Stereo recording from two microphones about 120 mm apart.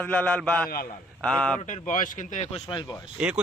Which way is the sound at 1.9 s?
90° left.